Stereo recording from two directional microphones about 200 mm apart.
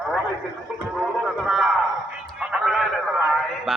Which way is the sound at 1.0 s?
Centre (ahead or behind).